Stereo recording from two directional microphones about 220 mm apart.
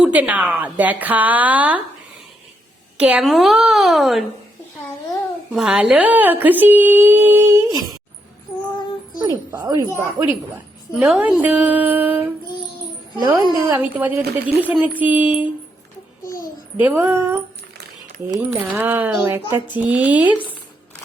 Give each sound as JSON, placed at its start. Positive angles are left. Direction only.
{"t": 0.0, "sound": "a woman's voice", "side_deg": -5}
{"t": 3.0, "sound": "a woman's voice", "side_deg": -5}
{"t": 5.5, "sound": "a woman's voice", "side_deg": -5}
{"t": 9.2, "sound": "a woman's voice", "side_deg": -15}
{"t": 16.2, "sound": "babbling", "side_deg": 15}
{"t": 16.7, "sound": "a woman's voice", "side_deg": -10}